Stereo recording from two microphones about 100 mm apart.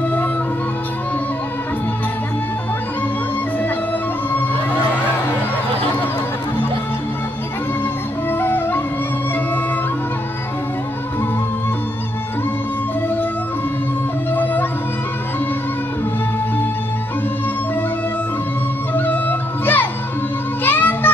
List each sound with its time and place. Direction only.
8.3 s music: 20° left (ahead or behind)
14.3 s music: 20° left (ahead or behind)
18.9 s music: 20° left (ahead or behind)